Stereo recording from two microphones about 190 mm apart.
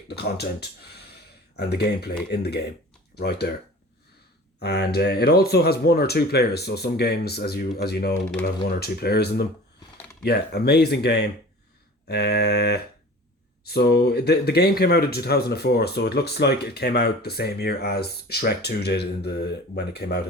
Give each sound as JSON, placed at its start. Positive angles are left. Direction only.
{"t": 0.2, "sound": "speech", "side_deg": 55}
{"t": 4.6, "sound": "speech", "side_deg": 55}